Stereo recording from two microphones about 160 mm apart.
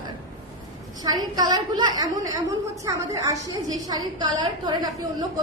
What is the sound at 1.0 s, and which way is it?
A woman's voice, 25° right (ahead or behind).